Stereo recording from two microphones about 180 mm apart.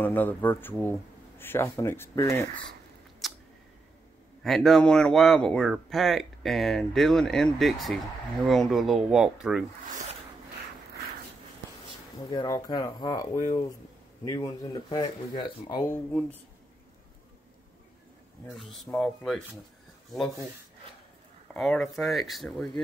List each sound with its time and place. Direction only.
0.0 s speech: 10° left (ahead or behind)
3.2 s a sound: centre (ahead or behind)
4.4 s speech: centre (ahead or behind)
12.3 s speech: 20° left (ahead or behind)
15.9 s speech: 10° left (ahead or behind)
18.7 s speech: centre (ahead or behind)
21.5 s speech: centre (ahead or behind)